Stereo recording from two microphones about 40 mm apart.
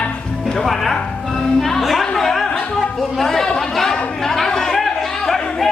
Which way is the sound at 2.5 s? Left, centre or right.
Centre.